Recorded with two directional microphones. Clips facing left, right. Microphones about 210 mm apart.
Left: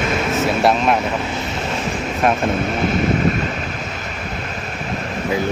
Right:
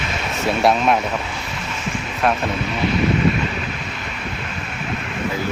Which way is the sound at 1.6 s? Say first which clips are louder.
Left 3 dB; 35° left (ahead or behind).